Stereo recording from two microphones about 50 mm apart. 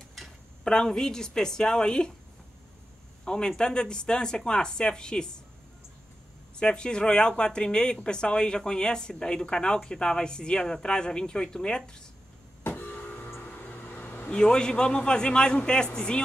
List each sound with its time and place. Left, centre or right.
0.7 s speech: centre
3.3 s speech: centre
6.5 s speech: centre
12.6 s vehicle: left
13.4 s a sound: left
14.3 s speech: centre